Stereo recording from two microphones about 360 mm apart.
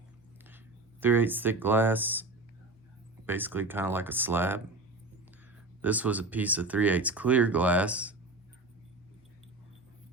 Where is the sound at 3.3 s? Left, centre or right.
Centre.